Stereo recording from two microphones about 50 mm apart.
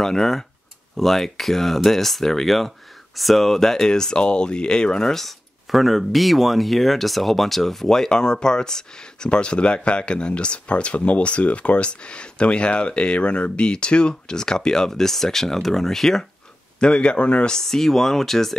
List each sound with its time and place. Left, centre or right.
0.0 s speech: centre
16.8 s speech: left
17.6 s speech: centre